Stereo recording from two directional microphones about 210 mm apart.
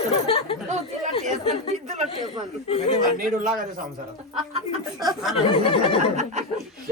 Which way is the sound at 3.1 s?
40° right (ahead or behind).